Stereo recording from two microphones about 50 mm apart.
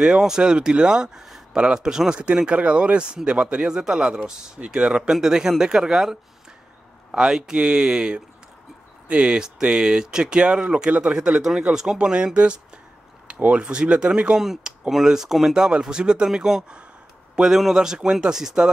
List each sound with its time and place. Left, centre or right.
0.0 s speech: centre
12.0 s speech: right
13.4 s speech: right
14.4 s speech: centre